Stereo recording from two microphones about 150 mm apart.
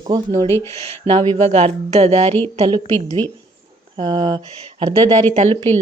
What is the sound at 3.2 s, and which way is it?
Speech, 15° left (ahead or behind).